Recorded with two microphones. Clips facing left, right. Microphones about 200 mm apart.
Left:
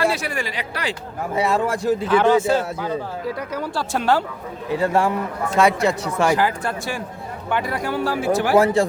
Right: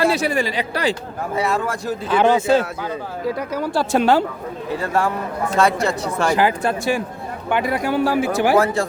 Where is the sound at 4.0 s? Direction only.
20° right (ahead or behind).